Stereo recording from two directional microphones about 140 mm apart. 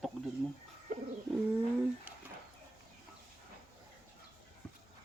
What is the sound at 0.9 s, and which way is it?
Bird, 70° right (ahead or behind).